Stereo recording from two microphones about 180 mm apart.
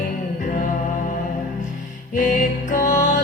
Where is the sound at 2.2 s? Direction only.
45° left (ahead or behind).